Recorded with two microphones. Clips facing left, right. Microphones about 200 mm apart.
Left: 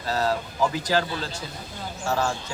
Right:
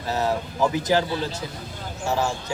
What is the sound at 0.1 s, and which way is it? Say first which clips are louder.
A man's voice: right 1 dB; 20° right (ahead or behind).